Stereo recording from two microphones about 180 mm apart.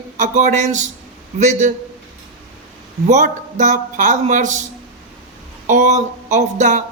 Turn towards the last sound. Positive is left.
turn(degrees=-40)  # may be behind; listen again after turning